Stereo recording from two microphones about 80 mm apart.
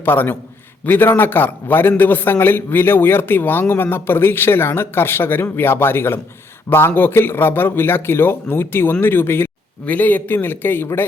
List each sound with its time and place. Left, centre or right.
0.0 s a man's voice: left